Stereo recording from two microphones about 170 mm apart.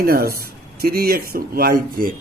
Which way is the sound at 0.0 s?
60° right (ahead or behind).